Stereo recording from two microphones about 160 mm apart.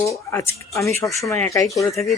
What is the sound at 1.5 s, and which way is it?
Speech, 20° left (ahead or behind).